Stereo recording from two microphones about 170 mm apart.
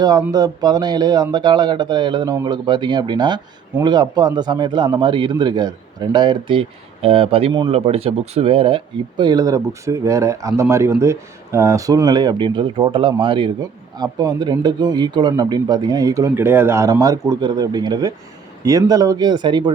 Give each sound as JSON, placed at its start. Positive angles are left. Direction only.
{"t": 0.0, "sound": "speech", "side_deg": -20}